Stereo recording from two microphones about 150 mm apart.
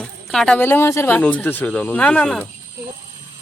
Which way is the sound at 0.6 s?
15° left (ahead or behind).